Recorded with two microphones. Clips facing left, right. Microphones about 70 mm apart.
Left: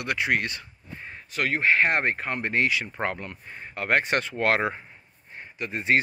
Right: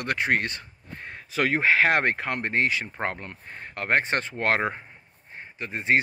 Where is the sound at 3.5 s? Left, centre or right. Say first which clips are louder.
Even; right.